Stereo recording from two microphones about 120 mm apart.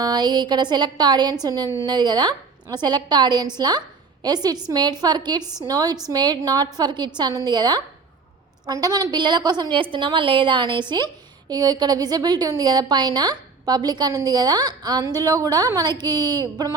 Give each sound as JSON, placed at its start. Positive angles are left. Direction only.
{"t": 0.0, "sound": "a woman's voice", "side_deg": -35}
{"t": 5.4, "sound": "a woman's voice", "side_deg": -5}
{"t": 5.6, "sound": "a woman's voice", "side_deg": -30}